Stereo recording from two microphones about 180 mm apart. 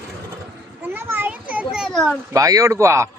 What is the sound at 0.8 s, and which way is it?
Children playing, 10° right (ahead or behind).